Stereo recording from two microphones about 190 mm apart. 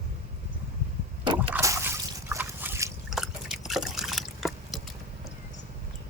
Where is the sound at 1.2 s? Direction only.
25° right (ahead or behind).